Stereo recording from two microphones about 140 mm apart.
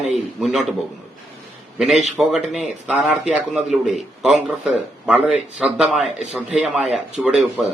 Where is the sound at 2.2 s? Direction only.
5° right (ahead or behind).